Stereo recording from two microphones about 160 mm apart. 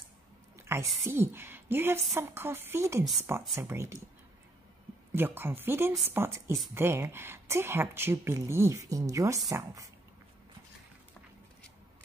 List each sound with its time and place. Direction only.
0.7 s a woman's voice: 15° right (ahead or behind)
5.1 s a woman's voice: 15° right (ahead or behind)